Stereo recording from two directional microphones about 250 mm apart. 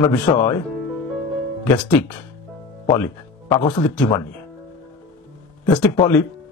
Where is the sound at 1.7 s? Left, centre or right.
Centre.